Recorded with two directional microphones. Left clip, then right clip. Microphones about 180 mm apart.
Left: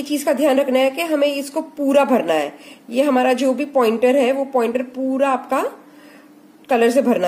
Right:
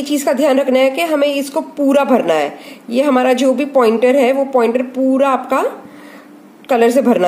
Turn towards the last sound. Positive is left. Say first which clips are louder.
# right 4 dB
turn(degrees=-5)  # may be behind; listen again after turning